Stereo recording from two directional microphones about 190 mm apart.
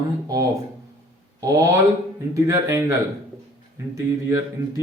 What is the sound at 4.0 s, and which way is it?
Speech, 15° right (ahead or behind).